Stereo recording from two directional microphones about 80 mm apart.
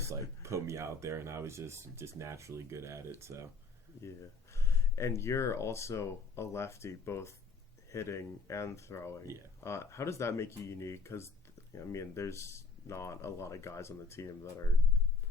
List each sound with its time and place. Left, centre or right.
0.1 s speech: right
4.5 s speech: left